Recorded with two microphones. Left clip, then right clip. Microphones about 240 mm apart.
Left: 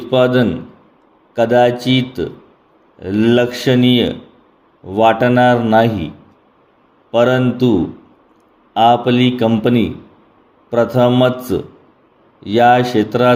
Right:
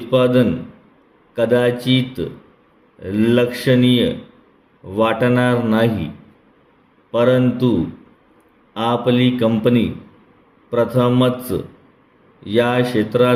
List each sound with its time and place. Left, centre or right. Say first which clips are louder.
0.1 s a man's voice: left 2 dB; centre
7.1 s a man's voice: left 2 dB; centre
8.7 s a man's voice: left 6 dB; centre